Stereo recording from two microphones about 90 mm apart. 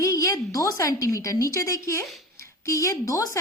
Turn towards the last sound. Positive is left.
turn(degrees=40)  # may be behind; listen again after turning